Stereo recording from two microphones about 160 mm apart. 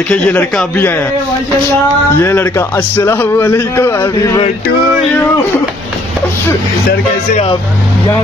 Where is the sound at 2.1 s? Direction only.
15° left (ahead or behind).